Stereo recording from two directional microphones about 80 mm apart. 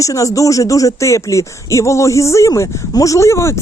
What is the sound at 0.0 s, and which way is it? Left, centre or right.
Speech, left.